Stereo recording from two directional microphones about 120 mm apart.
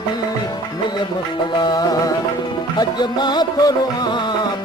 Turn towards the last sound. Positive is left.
turn(degrees=35)  # may be behind; listen again after turning